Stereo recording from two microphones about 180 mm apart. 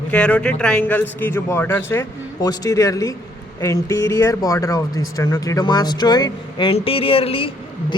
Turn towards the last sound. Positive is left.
turn(degrees=30)  # may be behind; listen again after turning